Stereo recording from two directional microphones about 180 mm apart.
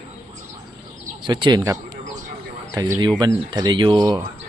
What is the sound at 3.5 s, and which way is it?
Speech, 25° right (ahead or behind).